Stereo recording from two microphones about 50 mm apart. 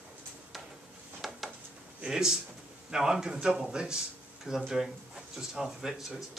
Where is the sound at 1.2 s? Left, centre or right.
Centre.